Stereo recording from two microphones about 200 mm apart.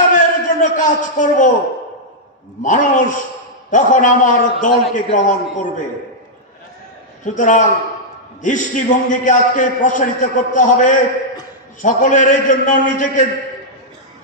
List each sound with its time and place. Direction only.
0.1 s a sound: 40° left (ahead or behind)
2.6 s a man's voice: 40° left (ahead or behind)
7.2 s a man's voice: 40° left (ahead or behind)